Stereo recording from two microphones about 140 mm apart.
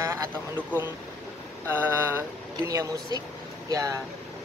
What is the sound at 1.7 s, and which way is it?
Speech, 15° right (ahead or behind).